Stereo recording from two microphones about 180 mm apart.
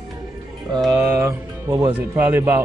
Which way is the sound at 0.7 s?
Centre (ahead or behind).